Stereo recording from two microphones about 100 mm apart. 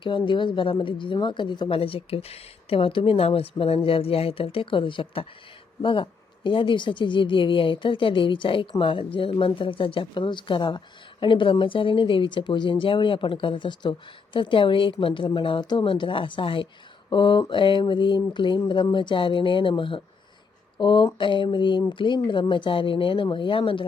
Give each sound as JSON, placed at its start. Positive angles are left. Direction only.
{"t": 0.0, "sound": "speech", "side_deg": 55}
{"t": 1.8, "sound": "a woman's voice", "side_deg": 70}